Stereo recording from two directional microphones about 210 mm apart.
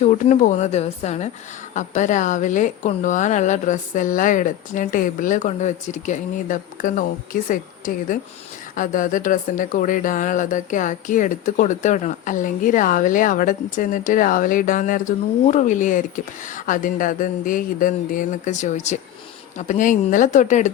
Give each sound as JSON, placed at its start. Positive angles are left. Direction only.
{"t": 0.0, "sound": "speech", "side_deg": 35}